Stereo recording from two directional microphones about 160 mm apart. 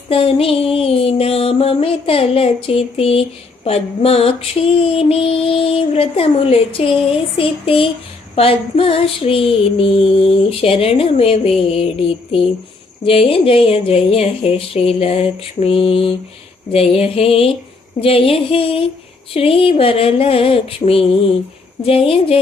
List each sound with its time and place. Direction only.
0.1 s music: 35° left (ahead or behind)